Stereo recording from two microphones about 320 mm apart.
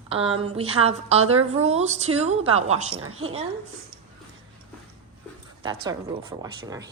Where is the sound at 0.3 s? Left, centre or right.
Centre.